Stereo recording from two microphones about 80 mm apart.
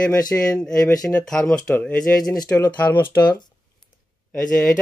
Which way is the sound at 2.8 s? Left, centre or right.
Left.